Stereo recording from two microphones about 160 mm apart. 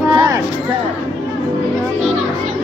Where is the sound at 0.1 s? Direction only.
20° right (ahead or behind).